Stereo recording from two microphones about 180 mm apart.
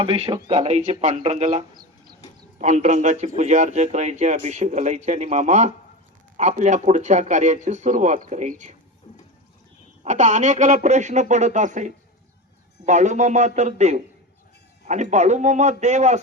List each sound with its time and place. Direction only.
0.0 s a man's voice: 30° right (ahead or behind)
1.7 s bird: 25° right (ahead or behind)
2.6 s a man's voice: 40° right (ahead or behind)
10.0 s a man's voice: 40° right (ahead or behind)